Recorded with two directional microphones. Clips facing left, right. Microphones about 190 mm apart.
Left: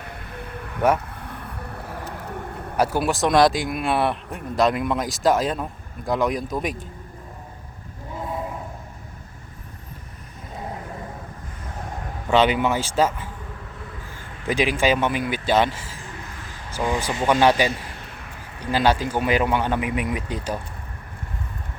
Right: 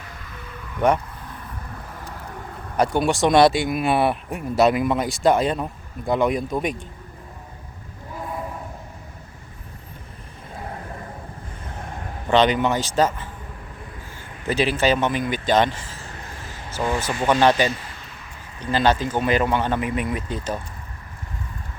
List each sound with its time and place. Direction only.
0.0 s vehicle: 60° left (ahead or behind)
2.7 s speech: 5° left (ahead or behind)
12.3 s speech: 10° left (ahead or behind)
14.4 s speech: 10° left (ahead or behind)